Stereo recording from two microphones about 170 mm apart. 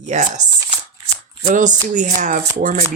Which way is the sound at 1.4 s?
50° right (ahead or behind).